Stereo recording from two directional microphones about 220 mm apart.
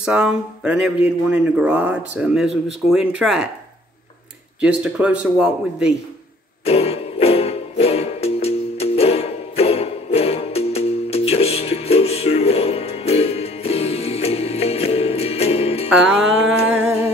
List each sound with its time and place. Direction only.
0.0 s speech: 5° right (ahead or behind)
4.6 s speech: 5° right (ahead or behind)
6.6 s music: 30° left (ahead or behind)
15.9 s music: 5° right (ahead or behind)